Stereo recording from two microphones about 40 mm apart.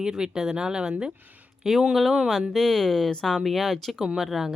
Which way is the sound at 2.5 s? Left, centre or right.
Centre.